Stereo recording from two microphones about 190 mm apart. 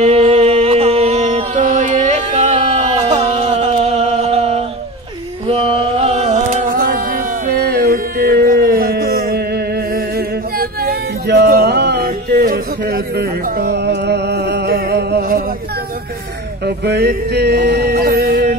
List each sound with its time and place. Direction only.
0.0 s music: 35° right (ahead or behind); by 15.4 s 55° right (ahead or behind)
16.6 s music: 60° right (ahead or behind)